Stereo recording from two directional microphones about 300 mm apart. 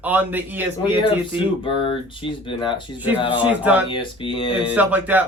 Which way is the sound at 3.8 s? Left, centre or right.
Centre.